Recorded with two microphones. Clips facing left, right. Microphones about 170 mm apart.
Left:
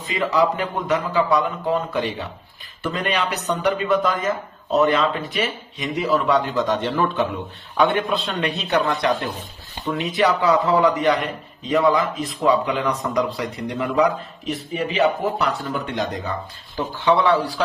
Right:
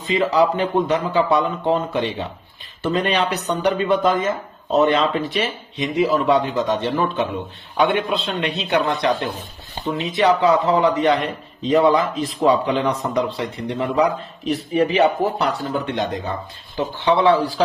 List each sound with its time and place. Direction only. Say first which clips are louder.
0.1 s speech: right 3 dB; 30° right (ahead or behind)